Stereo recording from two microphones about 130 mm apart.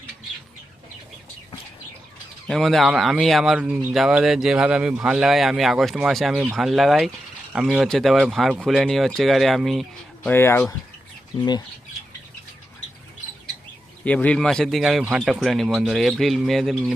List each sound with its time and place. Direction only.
2.5 s speech: centre (ahead or behind)
10.2 s speech: 15° left (ahead or behind)
14.0 s speech: 10° left (ahead or behind)